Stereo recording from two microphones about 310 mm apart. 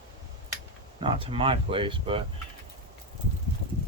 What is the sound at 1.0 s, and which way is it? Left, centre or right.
Speech, centre.